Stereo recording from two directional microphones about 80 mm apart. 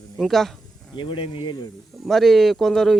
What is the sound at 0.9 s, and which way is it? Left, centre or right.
Speech, left.